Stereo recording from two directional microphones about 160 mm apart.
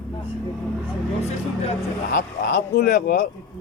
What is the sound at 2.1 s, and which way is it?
Speech, 70° left (ahead or behind).